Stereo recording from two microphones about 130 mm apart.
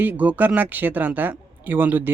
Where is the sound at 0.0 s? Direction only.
10° right (ahead or behind).